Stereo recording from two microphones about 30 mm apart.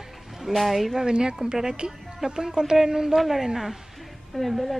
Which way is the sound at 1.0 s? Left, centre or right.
Right.